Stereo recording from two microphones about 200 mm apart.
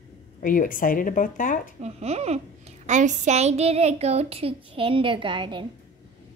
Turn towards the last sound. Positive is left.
turn(degrees=-25)  # may be behind; listen again after turning